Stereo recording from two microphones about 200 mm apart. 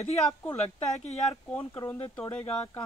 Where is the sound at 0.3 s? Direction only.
15° left (ahead or behind).